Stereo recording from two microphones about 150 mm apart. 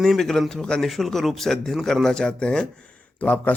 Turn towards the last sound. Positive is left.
turn(degrees=10)  # may be behind; listen again after turning